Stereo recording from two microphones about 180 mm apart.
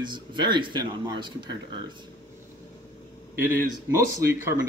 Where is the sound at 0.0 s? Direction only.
25° right (ahead or behind).